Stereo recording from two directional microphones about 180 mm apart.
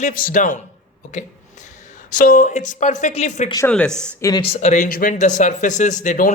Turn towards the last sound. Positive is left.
turn(degrees=45)  # may be behind; listen again after turning